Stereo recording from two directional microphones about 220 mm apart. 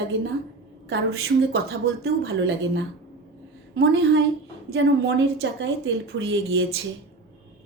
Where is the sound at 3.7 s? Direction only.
55° right (ahead or behind).